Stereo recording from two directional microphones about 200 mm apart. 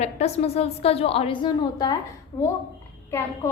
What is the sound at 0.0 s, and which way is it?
A woman's voice, 30° left (ahead or behind).